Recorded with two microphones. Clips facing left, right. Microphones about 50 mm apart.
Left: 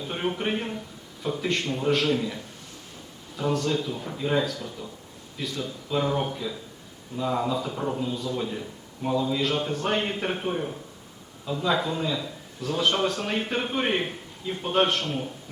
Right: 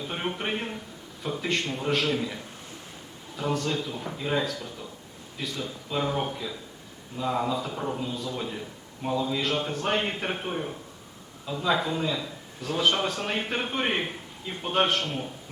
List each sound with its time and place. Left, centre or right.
0.0 s a man's voice: centre